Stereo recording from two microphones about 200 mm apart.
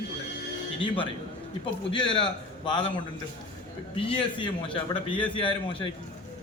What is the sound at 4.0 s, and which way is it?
A man's voice, 25° left (ahead or behind).